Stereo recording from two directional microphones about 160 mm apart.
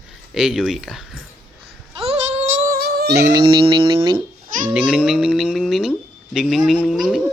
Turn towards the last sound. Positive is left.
turn(degrees=0)  # may be behind; listen again after turning